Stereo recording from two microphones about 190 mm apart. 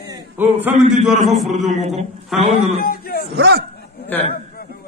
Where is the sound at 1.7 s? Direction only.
35° right (ahead or behind).